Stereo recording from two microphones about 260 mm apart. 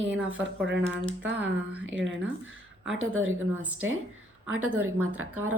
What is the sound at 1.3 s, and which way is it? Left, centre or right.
Speech, centre.